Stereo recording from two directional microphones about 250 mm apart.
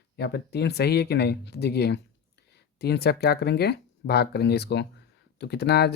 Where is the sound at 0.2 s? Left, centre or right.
Left.